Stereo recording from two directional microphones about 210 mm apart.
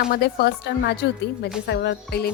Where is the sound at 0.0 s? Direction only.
45° left (ahead or behind).